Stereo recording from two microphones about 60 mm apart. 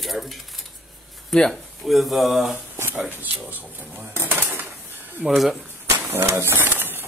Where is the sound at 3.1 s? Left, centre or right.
Right.